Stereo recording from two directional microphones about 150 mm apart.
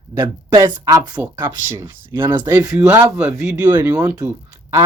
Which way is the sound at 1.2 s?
15° right (ahead or behind).